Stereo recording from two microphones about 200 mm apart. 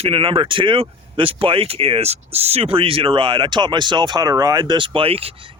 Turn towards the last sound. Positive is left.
turn(degrees=-30)  # may be behind; listen again after turning